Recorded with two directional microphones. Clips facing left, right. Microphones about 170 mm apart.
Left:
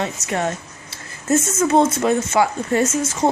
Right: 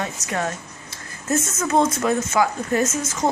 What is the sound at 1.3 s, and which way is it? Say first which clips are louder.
A woman's voice: left 5 dB; 25° left (ahead or behind).